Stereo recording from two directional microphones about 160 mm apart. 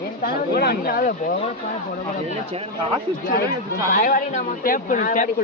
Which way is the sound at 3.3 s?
75° left (ahead or behind).